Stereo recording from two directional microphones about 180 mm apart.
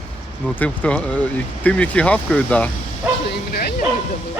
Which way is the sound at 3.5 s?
60° left (ahead or behind).